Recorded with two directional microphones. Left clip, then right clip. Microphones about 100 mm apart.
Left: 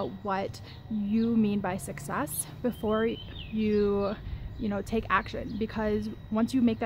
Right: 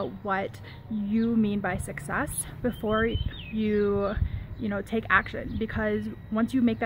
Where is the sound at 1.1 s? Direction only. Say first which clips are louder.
Right 1 dB; 35° left (ahead or behind).